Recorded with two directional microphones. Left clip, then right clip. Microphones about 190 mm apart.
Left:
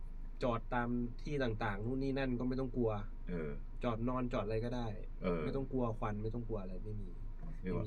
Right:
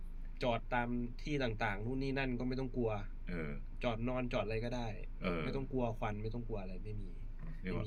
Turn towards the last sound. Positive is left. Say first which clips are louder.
# left 1 dB
turn(degrees=15)  # may be behind; listen again after turning